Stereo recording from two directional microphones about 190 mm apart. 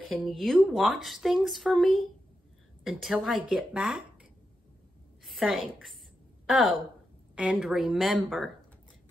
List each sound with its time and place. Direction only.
0.1 s a woman's voice: centre (ahead or behind)